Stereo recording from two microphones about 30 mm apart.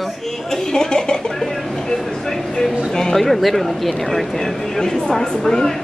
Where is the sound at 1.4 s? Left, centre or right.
Centre.